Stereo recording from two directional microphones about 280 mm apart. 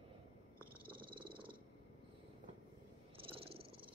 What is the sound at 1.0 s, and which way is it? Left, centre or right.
Purr, centre.